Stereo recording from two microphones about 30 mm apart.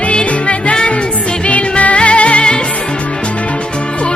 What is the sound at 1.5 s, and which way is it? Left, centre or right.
Music, left.